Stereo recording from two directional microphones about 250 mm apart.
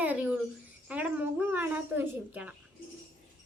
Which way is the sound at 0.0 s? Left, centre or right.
Centre.